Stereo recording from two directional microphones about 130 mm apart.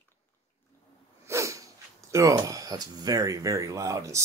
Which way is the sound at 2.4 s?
25° right (ahead or behind).